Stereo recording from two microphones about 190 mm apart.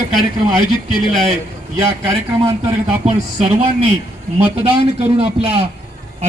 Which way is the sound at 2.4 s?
15° right (ahead or behind).